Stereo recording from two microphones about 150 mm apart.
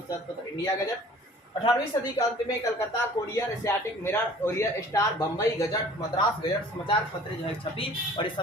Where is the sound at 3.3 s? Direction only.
15° left (ahead or behind).